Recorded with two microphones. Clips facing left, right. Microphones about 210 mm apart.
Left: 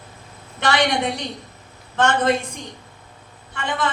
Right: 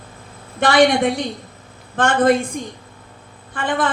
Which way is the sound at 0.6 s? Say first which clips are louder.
Right 6 dB; 50° right (ahead or behind).